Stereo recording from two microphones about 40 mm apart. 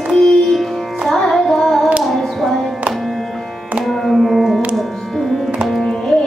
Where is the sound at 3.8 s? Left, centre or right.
Centre.